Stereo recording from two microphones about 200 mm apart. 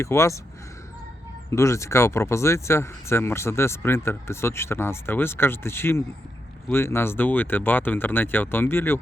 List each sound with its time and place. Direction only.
0.0 s speech: 15° left (ahead or behind)
1.5 s speech: 15° left (ahead or behind)